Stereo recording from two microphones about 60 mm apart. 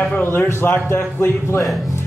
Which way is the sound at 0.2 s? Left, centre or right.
Left.